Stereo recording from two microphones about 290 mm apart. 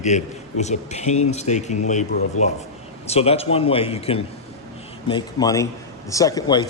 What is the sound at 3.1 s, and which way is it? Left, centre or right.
A man's voice, left.